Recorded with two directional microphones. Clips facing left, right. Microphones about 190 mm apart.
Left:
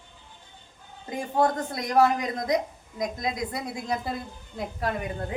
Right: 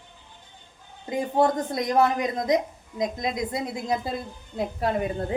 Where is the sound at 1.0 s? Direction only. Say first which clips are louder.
Right 2 dB; 20° right (ahead or behind).